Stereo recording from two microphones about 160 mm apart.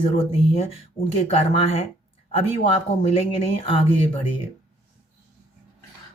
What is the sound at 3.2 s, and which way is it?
Speech, 35° left (ahead or behind).